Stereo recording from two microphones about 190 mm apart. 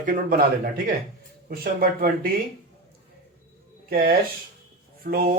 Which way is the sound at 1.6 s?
50° right (ahead or behind).